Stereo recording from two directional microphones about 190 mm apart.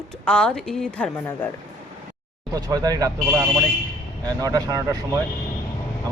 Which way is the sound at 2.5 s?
20° right (ahead or behind).